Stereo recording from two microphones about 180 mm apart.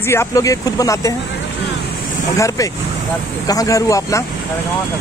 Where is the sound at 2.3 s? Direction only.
20° left (ahead or behind).